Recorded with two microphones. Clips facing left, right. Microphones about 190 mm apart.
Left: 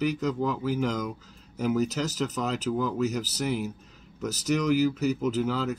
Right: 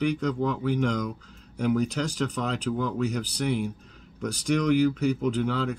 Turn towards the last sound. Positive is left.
turn(degrees=5)  # may be behind; listen again after turning